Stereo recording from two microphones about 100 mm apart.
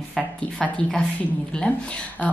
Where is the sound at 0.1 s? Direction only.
5° left (ahead or behind).